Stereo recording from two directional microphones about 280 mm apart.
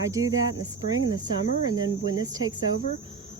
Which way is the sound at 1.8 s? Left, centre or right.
Centre.